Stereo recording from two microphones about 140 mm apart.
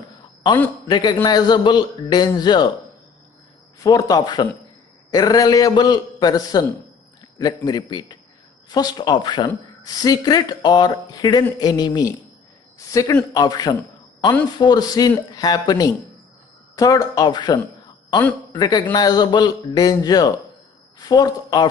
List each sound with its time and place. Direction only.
0.8 s a man's voice: 30° left (ahead or behind)
3.8 s a man's voice: 25° left (ahead or behind)